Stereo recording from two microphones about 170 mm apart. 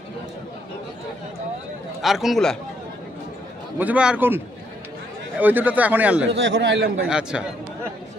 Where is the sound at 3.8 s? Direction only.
5° right (ahead or behind).